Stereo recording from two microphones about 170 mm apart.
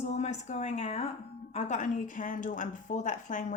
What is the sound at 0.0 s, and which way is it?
A woman's voice, 40° left (ahead or behind).